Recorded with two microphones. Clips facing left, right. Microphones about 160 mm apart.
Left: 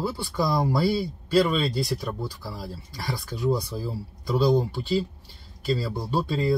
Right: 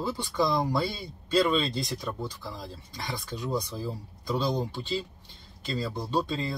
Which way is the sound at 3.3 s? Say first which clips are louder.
Left 6 dB; 20° right (ahead or behind).